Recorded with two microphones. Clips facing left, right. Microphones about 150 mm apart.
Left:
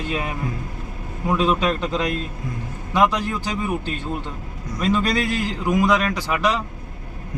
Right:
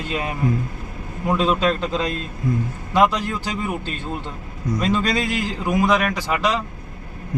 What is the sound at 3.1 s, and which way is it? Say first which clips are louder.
Speech: even; 15° left (ahead or behind).